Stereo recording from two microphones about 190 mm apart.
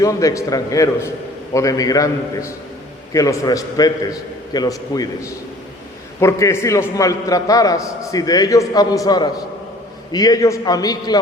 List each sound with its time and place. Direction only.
0.0 s a man's voice: 15° left (ahead or behind)